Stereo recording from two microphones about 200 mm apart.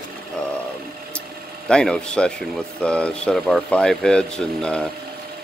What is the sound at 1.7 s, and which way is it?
Speech, 5° left (ahead or behind).